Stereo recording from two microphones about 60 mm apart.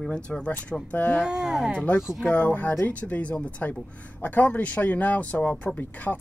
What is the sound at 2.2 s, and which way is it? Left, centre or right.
Speech, left.